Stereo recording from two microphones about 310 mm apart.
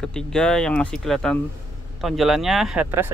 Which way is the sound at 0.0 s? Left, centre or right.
Centre.